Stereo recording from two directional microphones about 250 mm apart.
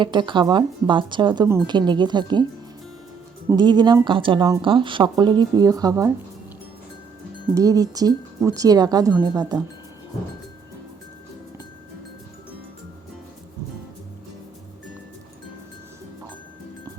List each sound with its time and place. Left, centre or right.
0.0 s speech: centre
3.5 s speech: centre
7.5 s speech: centre